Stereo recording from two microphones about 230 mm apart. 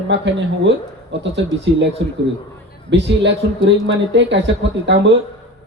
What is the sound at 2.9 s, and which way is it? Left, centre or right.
A man's voice, right.